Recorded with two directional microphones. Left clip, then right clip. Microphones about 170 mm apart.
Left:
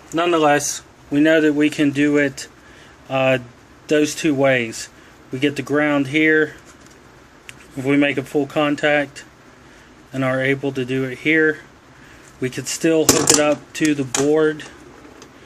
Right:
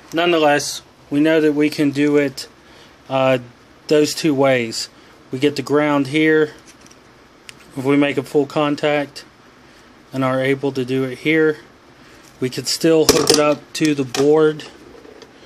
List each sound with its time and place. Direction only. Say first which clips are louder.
0.1 s speech: right 1 dB; 20° right (ahead or behind)